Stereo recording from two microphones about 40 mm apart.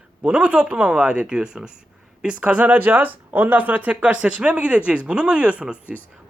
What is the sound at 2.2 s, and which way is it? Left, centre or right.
Speech, right.